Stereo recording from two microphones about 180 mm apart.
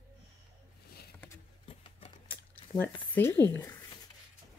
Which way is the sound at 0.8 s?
60° left (ahead or behind).